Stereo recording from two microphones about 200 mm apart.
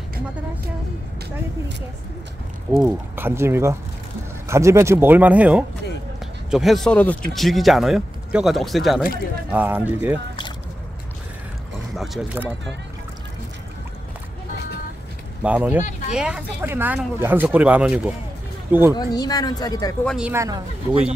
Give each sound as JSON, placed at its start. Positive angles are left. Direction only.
{"t": 2.7, "sound": "speech", "side_deg": -10}
{"t": 12.0, "sound": "speech", "side_deg": -5}
{"t": 15.4, "sound": "speech", "side_deg": -10}
{"t": 18.9, "sound": "speech", "side_deg": 20}
{"t": 20.1, "sound": "speech", "side_deg": -5}
{"t": 20.4, "sound": "speech", "side_deg": -20}